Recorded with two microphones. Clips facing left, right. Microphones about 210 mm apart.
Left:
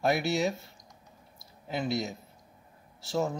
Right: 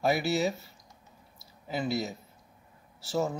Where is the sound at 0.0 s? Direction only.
Centre (ahead or behind).